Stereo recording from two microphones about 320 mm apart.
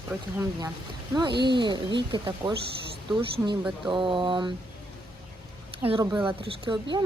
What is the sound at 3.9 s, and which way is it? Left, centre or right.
Speech, centre.